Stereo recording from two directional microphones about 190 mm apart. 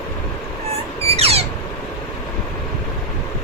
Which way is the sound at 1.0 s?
30° right (ahead or behind).